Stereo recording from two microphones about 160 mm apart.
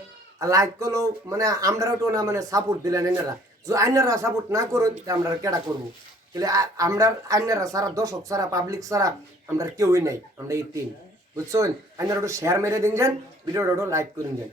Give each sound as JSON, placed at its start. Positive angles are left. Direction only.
{"t": 0.3, "sound": "speech", "side_deg": -20}